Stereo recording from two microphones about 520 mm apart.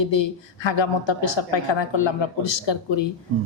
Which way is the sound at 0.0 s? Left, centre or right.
Left.